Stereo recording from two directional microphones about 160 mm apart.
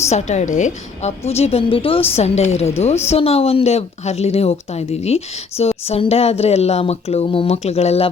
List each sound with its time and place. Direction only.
0.1 s speech: 45° left (ahead or behind)